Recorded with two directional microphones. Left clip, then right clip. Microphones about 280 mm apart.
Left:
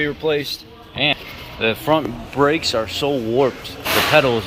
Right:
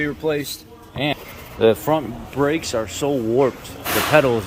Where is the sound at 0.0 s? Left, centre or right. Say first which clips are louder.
Left 2 dB; centre.